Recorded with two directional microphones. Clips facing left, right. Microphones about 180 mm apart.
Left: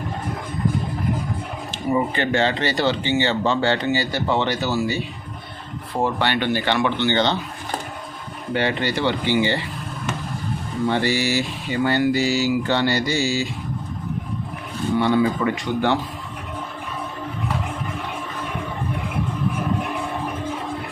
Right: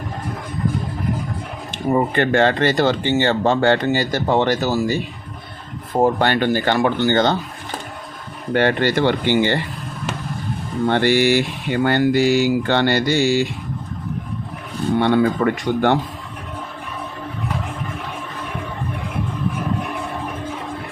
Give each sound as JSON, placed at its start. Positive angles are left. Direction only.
{"t": 1.7, "sound": "speech", "side_deg": -55}
{"t": 5.9, "sound": "speech", "side_deg": -45}
{"t": 8.5, "sound": "speech", "side_deg": -50}
{"t": 10.8, "sound": "speech", "side_deg": -60}
{"t": 14.9, "sound": "speech", "side_deg": -60}